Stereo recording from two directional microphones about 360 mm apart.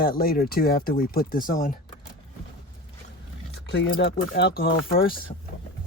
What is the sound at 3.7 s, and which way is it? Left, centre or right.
Speech, left.